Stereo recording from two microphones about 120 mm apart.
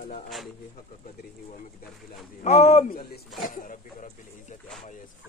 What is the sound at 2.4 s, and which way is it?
Speech, 65° left (ahead or behind).